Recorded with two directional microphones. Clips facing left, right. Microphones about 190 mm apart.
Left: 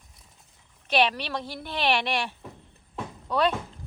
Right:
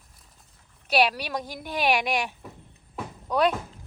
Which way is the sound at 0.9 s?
10° right (ahead or behind).